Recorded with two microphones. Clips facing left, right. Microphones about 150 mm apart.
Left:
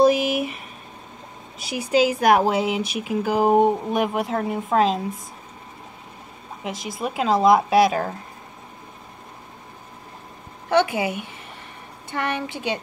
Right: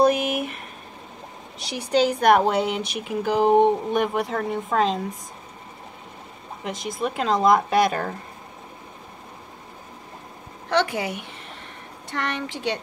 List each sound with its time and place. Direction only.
0.0 s speech: 5° left (ahead or behind)
1.8 s speech: 5° left (ahead or behind)
6.6 s speech: 5° left (ahead or behind)
10.7 s speech: 5° left (ahead or behind)